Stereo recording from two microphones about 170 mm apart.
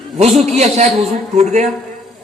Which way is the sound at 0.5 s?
40° right (ahead or behind).